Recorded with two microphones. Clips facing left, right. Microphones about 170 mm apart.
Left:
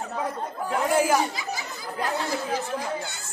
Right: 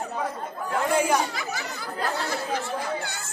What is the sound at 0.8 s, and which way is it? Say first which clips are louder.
Chatter: left 1 dB; centre (ahead or behind).